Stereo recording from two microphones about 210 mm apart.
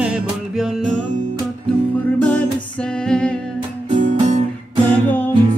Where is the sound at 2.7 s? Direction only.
5° left (ahead or behind).